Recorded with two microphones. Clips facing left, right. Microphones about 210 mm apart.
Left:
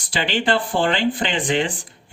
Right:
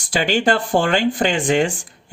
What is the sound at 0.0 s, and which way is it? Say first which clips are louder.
Speech: right 4 dB; 45° right (ahead or behind).